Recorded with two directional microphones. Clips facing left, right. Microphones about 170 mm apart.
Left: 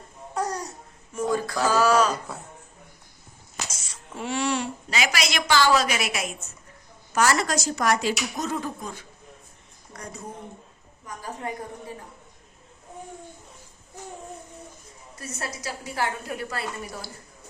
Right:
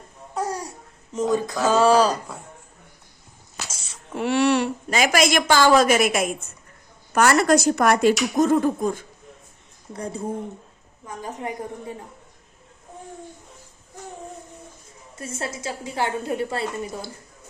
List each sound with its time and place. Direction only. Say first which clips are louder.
0.3 s babbling: right 1 dB; 5° right (ahead or behind)
1.1 s a woman's voice: right 3 dB; 20° right (ahead or behind)
4.2 s a woman's voice: right 7 dB; 65° right (ahead or behind)
9.9 s a woman's voice: right 10 dB; 30° right (ahead or behind)
15.2 s a woman's voice: right 4 dB; 25° right (ahead or behind)